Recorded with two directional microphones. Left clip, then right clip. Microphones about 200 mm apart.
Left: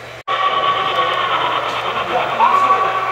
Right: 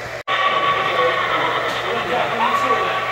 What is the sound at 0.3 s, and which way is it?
Radio, 50° left (ahead or behind).